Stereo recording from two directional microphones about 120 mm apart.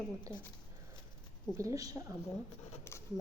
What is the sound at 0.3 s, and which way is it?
Speech, 35° left (ahead or behind).